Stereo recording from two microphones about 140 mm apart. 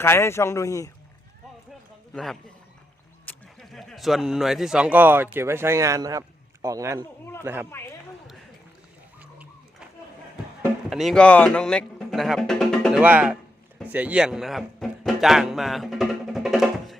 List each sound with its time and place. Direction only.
0.0 s speech: 15° left (ahead or behind)
2.1 s a man's voice: 5° left (ahead or behind); by 7.7 s 15° right (ahead or behind)
7.7 s speech: 20° left (ahead or behind)
10.8 s speech: centre (ahead or behind)
11.2 s speech: 10° left (ahead or behind)
13.0 s speech: 10° right (ahead or behind)